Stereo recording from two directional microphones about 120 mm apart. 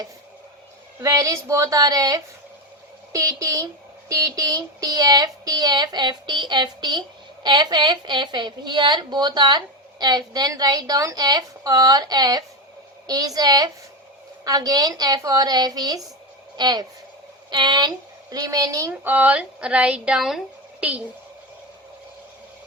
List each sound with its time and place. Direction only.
1.0 s a woman's voice: 30° right (ahead or behind)
19.0 s a woman's voice: 15° right (ahead or behind)